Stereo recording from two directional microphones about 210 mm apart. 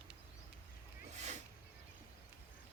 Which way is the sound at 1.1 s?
35° right (ahead or behind).